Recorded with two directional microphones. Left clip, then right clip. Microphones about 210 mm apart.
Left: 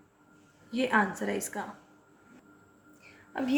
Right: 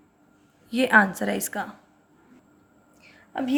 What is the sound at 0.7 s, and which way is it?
Speech, 45° right (ahead or behind).